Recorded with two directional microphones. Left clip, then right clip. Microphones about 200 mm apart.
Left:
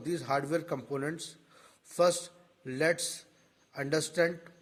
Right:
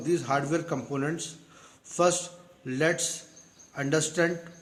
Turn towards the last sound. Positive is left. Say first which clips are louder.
# right 3 dB
turn(degrees=25)  # may be behind; listen again after turning